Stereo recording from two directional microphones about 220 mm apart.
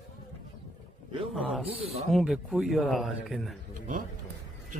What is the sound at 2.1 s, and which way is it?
A man's voice, centre (ahead or behind).